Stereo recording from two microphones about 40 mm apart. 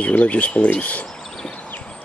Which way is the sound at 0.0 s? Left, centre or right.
Left.